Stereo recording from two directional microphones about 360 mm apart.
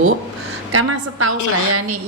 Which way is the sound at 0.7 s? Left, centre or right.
Right.